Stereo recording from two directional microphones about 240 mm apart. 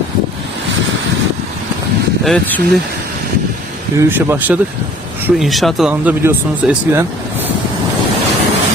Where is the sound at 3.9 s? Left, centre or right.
Centre.